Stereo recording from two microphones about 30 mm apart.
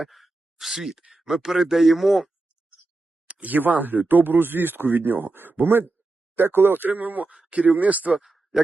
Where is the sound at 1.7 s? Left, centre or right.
Centre.